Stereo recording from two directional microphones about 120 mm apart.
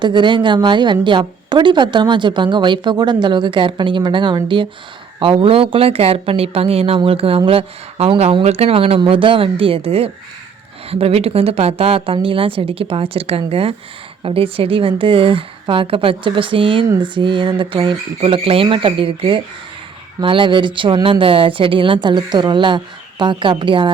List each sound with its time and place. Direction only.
0.0 s a woman's voice: 40° right (ahead or behind)